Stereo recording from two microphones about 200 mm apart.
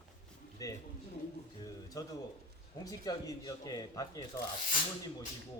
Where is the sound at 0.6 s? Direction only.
15° left (ahead or behind).